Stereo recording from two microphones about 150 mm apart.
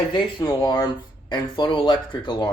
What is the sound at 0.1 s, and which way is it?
Speech, 30° left (ahead or behind).